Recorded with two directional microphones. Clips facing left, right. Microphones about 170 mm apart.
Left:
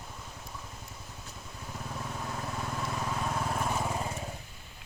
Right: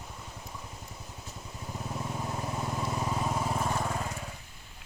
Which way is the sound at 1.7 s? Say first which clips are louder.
Right 3 dB; 15° right (ahead or behind).